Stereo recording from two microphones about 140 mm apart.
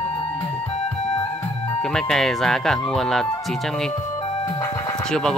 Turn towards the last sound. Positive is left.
turn(degrees=5)  # may be behind; listen again after turning